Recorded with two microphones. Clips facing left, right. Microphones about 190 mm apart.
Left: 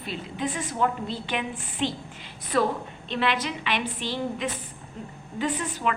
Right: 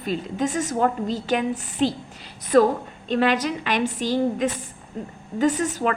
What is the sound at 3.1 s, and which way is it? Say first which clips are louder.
A woman's voice: right 6 dB; 45° right (ahead or behind).